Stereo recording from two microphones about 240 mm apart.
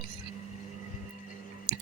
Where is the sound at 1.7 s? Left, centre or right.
Right.